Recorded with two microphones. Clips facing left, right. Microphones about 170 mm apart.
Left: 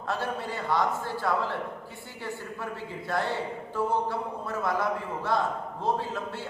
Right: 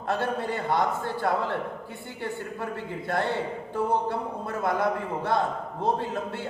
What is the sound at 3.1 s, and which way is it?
A man's voice, 55° right (ahead or behind).